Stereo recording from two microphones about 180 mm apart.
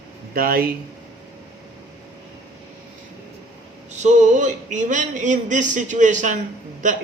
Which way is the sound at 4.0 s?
40° right (ahead or behind).